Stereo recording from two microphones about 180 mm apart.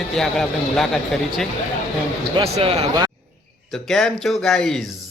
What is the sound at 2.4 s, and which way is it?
Speech, 30° right (ahead or behind).